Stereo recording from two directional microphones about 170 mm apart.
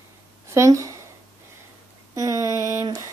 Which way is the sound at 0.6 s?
20° right (ahead or behind).